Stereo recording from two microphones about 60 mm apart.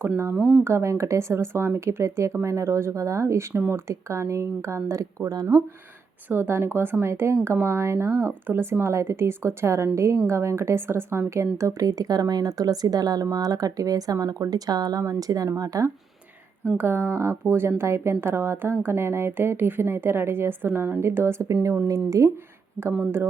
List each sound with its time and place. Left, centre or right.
0.6 s speech: right
6.2 s a woman's voice: right
8.3 s speech: right
11.8 s a woman's voice: right
16.7 s a woman's voice: right